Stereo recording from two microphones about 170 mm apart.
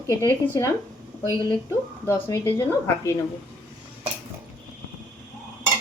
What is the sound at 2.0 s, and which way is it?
A woman's voice, 15° left (ahead or behind).